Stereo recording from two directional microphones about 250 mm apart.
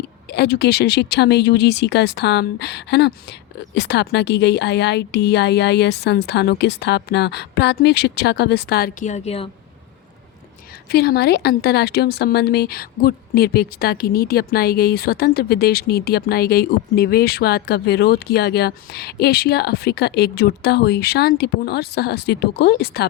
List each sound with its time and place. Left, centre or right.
0.3 s speech: left
10.8 s speech: left